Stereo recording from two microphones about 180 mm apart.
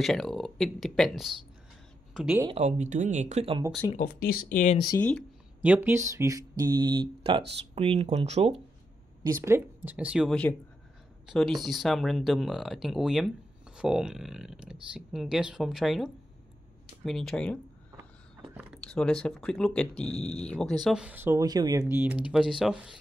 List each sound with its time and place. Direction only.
0.0 s speech: centre (ahead or behind)
2.4 s speech: 35° right (ahead or behind)
3.9 s speech: 55° left (ahead or behind)
5.6 s speech: 10° right (ahead or behind); by 8.5 s 35° right (ahead or behind)
9.2 s speech: 15° right (ahead or behind); by 17.6 s 5° left (ahead or behind)
18.5 s a sound: 5° right (ahead or behind)
18.8 s speech: 5° left (ahead or behind)